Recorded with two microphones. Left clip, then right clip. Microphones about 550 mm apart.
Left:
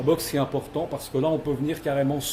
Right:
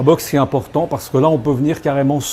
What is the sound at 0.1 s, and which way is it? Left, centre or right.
Speech, right.